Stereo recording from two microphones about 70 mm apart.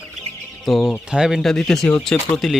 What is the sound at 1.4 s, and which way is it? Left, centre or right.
Speech, centre.